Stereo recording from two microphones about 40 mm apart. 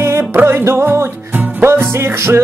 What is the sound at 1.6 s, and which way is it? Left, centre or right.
Speech, right.